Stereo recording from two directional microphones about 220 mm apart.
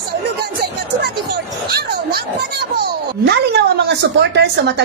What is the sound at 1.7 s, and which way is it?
A woman's voice, 45° right (ahead or behind).